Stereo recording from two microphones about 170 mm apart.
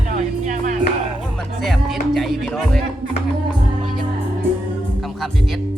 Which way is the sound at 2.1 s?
Centre (ahead or behind).